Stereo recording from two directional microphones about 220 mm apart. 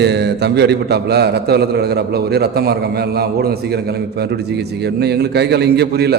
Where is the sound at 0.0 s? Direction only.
50° right (ahead or behind).